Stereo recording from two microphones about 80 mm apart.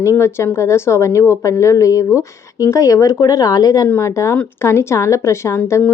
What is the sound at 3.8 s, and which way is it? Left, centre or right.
A woman's voice, left.